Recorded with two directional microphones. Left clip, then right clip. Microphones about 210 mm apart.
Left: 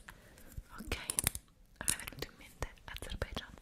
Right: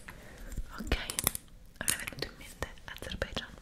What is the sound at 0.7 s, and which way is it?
Whispering, 10° left (ahead or behind).